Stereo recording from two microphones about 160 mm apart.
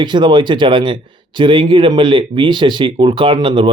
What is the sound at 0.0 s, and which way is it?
Speech, 30° right (ahead or behind).